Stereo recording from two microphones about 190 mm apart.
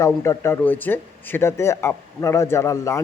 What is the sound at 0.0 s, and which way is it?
Speech, 15° left (ahead or behind).